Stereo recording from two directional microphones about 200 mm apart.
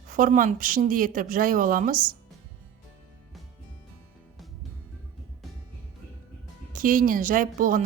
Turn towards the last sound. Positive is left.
turn(degrees=-40)  # may be behind; listen again after turning